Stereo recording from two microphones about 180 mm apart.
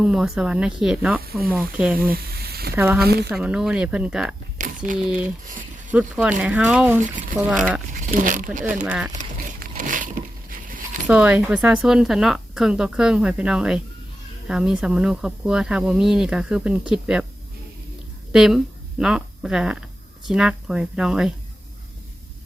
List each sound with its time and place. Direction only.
0.0 s speech: 5° right (ahead or behind)
2.0 s a sound: 55° right (ahead or behind)
2.7 s speech: 10° right (ahead or behind)
3.0 s speech: 60° right (ahead or behind)
3.3 s speech: 5° right (ahead or behind)
4.6 s a sound: 45° right (ahead or behind)
4.9 s speech: 5° right (ahead or behind)
8.0 s speech: 45° right (ahead or behind)
8.6 s speech: 10° right (ahead or behind)
9.1 s a sound: 45° right (ahead or behind)
11.0 s speech: 10° right (ahead or behind)
18.3 s speech: centre (ahead or behind)